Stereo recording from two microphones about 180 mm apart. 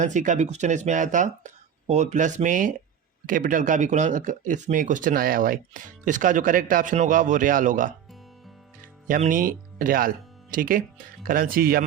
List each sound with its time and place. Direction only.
0.0 s speech: 45° right (ahead or behind)
9.0 s speech: 50° right (ahead or behind)